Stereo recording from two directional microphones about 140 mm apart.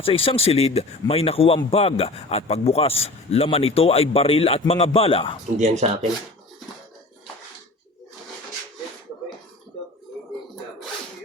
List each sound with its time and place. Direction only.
0.0 s a man's voice: 45° left (ahead or behind)
5.5 s speech: 55° right (ahead or behind)